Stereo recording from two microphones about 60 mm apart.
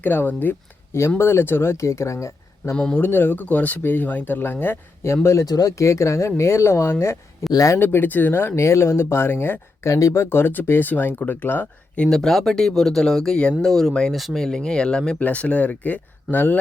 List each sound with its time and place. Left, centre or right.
0.0 s speech: left
1.2 s speech: left
1.8 s speech: left
2.9 s speech: left
5.0 s speech: left
7.5 s speech: left
7.8 s speech: left
9.9 s speech: left
10.2 s speech: left
12.0 s speech: centre
14.4 s speech: centre; by 16.6 s left